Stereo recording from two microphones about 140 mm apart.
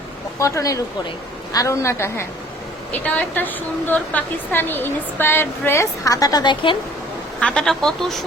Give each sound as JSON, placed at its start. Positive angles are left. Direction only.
{"t": 0.3, "sound": "a woman's voice", "side_deg": 20}
{"t": 7.3, "sound": "speech", "side_deg": 5}